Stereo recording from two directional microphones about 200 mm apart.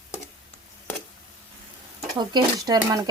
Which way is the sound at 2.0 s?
20° right (ahead or behind).